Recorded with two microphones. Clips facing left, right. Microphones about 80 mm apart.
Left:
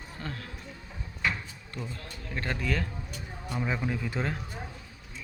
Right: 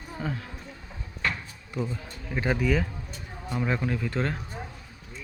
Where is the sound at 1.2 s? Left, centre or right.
Centre.